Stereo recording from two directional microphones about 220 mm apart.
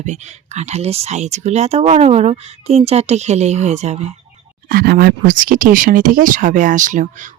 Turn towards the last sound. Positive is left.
turn(degrees=-35)  # may be behind; listen again after turning